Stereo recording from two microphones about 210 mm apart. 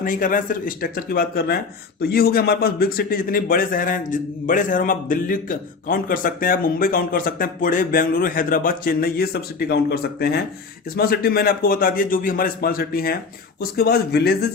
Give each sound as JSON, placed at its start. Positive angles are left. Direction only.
{"t": 0.0, "sound": "a man's voice", "side_deg": 40}